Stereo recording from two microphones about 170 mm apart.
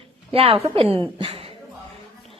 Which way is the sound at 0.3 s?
35° right (ahead or behind).